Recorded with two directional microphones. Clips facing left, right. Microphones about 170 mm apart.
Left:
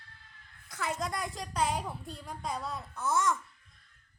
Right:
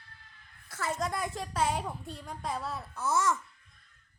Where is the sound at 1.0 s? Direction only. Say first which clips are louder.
Right 2 dB; centre (ahead or behind).